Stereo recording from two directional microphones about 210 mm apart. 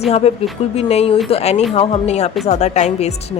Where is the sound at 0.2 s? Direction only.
30° left (ahead or behind).